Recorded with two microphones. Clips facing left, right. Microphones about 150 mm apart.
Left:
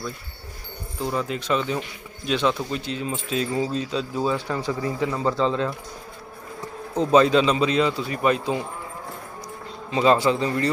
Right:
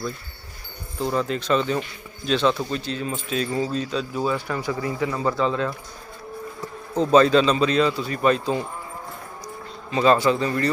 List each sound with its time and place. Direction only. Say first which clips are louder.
1.0 s a man's voice: right 2 dB; 10° left (ahead or behind)
7.1 s a man's voice: right 1 dB; 15° left (ahead or behind)
9.9 s speech: right 1 dB; 20° left (ahead or behind)